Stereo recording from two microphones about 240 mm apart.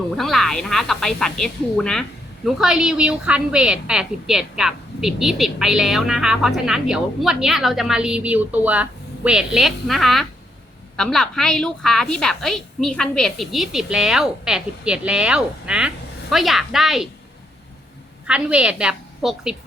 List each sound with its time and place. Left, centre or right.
0.2 s speech: centre
18.3 s speech: centre